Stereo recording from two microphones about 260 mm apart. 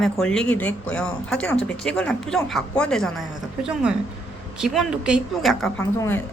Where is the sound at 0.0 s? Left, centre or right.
Centre.